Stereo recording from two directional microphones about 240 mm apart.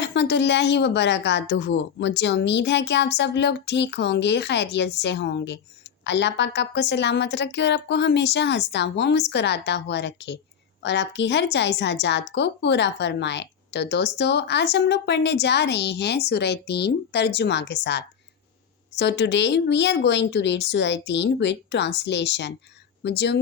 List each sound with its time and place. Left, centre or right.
0.0 s a woman's voice: left